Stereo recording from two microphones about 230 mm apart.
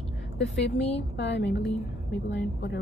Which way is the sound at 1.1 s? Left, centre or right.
Left.